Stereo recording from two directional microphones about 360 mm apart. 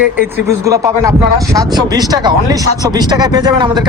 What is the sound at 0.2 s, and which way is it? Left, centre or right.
A man's voice, centre.